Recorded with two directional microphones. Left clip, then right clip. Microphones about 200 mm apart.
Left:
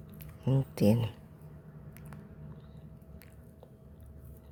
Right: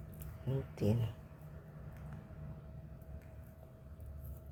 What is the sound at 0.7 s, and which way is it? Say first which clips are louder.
Speech: left 10 dB; 45° left (ahead or behind).